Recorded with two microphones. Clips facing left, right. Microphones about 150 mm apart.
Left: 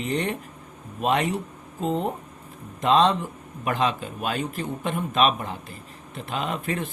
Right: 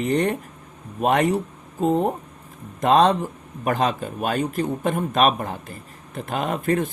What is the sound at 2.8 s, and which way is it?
Speech, 45° right (ahead or behind).